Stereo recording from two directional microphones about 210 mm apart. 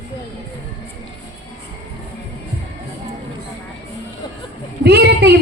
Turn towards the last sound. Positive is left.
turn(degrees=-50)  # may be behind; listen again after turning